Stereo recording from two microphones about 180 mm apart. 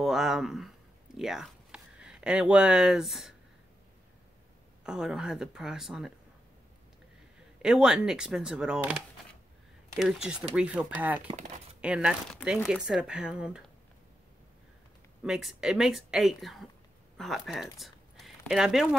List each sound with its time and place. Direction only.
0.0 s speech: centre (ahead or behind)
4.8 s speech: 5° right (ahead or behind)
7.6 s speech: 5° right (ahead or behind)
11.2 s speech: 40° right (ahead or behind)
11.8 s speech: 5° right (ahead or behind)
15.2 s speech: centre (ahead or behind)
17.7 s a sound: centre (ahead or behind)